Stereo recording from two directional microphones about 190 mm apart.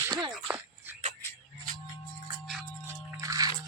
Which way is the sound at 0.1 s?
20° right (ahead or behind).